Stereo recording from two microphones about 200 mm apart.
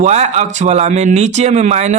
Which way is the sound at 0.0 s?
35° right (ahead or behind).